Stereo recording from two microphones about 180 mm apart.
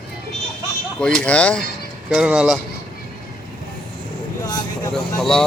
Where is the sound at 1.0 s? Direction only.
5° left (ahead or behind).